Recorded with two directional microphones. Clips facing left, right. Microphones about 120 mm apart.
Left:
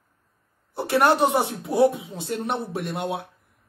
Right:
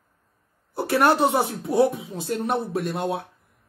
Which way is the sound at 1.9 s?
25° left (ahead or behind).